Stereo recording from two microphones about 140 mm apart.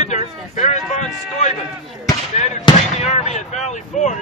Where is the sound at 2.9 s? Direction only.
55° left (ahead or behind).